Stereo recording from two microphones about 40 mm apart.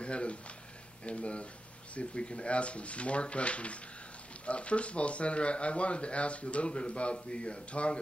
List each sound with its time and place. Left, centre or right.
0.0 s speech: left